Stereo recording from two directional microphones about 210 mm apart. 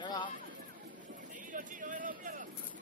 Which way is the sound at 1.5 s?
40° right (ahead or behind).